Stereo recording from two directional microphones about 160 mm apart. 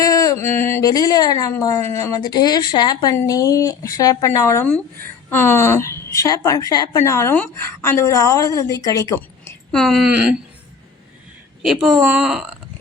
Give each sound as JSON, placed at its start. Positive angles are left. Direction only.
{"t": 0.0, "sound": "speech", "side_deg": 20}
{"t": 9.7, "sound": "speech", "side_deg": 0}
{"t": 11.6, "sound": "speech", "side_deg": 0}